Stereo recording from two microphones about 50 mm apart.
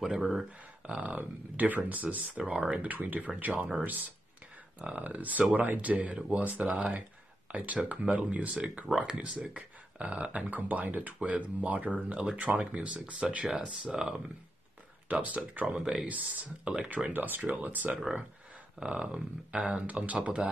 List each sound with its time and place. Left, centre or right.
0.0 s speech: centre
0.8 s speech: right
1.1 s speech: right
2.3 s speech: centre
2.7 s speech: right
4.7 s speech: centre
5.0 s speech: right
7.5 s speech: right
15.0 s speech: right
15.6 s speech: centre
16.1 s speech: right
16.6 s speech: centre
16.9 s speech: right
17.9 s speech: centre; by 20.2 s right